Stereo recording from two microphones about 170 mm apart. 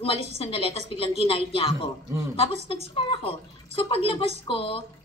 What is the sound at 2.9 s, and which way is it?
A woman's voice, 30° left (ahead or behind).